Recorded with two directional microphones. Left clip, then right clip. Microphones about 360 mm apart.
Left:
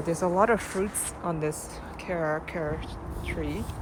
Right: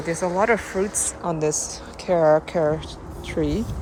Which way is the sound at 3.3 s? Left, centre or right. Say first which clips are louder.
Right 10 dB; right.